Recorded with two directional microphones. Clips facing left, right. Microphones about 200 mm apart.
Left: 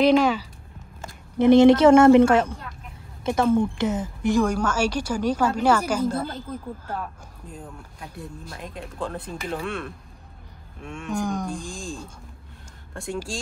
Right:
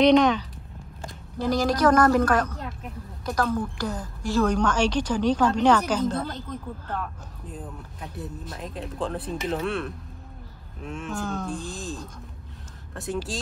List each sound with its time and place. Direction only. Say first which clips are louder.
0.0 s speech: right 1 dB; 5° left (ahead or behind)
1.4 s a woman's voice: left 9 dB; 25° left (ahead or behind); by 11.1 s 5° right (ahead or behind)
11.1 s a woman's voice: left 5 dB; 15° left (ahead or behind)
11.7 s speech: even; 5° right (ahead or behind)